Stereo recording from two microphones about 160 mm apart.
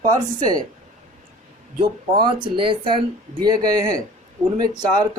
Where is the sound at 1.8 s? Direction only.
30° right (ahead or behind).